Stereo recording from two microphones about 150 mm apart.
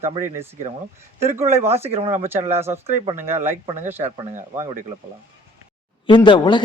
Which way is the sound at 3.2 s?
15° right (ahead or behind).